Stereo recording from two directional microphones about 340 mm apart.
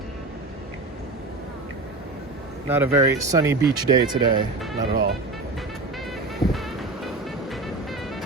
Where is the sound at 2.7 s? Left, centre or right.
Centre.